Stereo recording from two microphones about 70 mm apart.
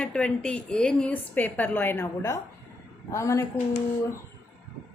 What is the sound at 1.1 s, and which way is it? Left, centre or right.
Speech, left.